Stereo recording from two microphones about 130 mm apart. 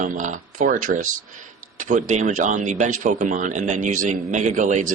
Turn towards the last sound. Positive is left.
turn(degrees=-75)  # may be behind; listen again after turning